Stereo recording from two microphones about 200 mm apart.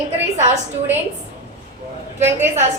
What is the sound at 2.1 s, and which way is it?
Speech, 10° right (ahead or behind).